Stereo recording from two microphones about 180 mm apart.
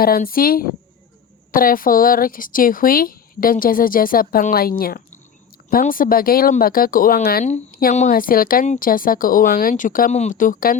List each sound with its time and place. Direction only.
0.0 s speech: 55° left (ahead or behind)